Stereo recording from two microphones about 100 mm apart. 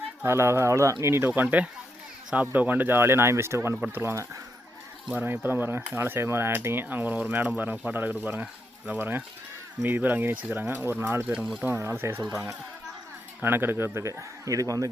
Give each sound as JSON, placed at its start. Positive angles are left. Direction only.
{"t": 0.2, "sound": "speech", "side_deg": -25}
{"t": 11.3, "sound": "speech", "side_deg": -10}
{"t": 11.8, "sound": "speech", "side_deg": -25}
{"t": 12.2, "sound": "speech", "side_deg": -5}
{"t": 13.4, "sound": "speech", "side_deg": -20}